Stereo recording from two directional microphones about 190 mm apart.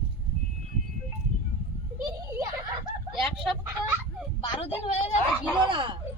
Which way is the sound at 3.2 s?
Centre (ahead or behind).